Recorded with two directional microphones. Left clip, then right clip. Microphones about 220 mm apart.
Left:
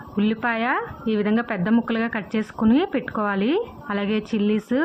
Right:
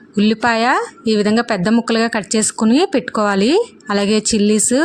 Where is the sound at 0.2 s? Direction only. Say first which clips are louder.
Right 8 dB; 55° right (ahead or behind).